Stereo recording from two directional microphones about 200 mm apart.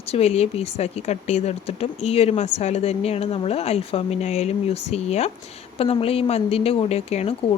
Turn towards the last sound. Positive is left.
turn(degrees=30)  # may be behind; listen again after turning